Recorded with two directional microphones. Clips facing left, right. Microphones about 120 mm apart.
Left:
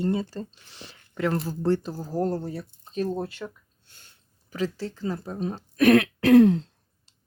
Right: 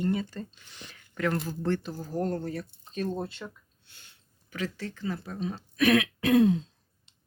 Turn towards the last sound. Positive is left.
turn(degrees=65)  # may be behind; listen again after turning